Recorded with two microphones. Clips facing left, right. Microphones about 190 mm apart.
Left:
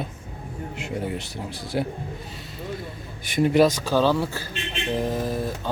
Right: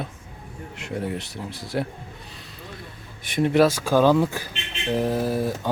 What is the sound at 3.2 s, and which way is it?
A man's voice, centre (ahead or behind).